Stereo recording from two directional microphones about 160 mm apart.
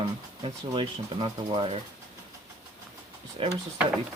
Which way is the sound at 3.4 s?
35° right (ahead or behind).